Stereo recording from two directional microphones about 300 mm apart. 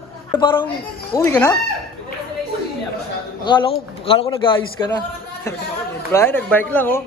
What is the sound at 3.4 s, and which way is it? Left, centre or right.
A man's voice, centre.